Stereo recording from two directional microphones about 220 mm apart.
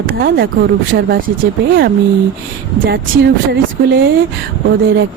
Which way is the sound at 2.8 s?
50° right (ahead or behind).